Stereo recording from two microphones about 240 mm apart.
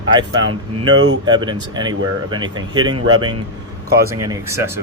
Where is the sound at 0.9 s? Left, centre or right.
Right.